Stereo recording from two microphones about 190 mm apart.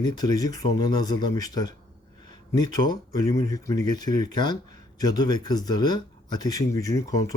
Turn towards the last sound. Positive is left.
turn(degrees=20)  # may be behind; listen again after turning